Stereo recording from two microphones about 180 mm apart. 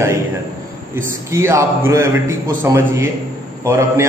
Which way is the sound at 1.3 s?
15° right (ahead or behind).